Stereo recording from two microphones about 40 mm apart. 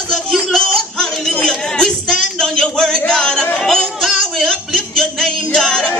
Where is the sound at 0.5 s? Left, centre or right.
Centre.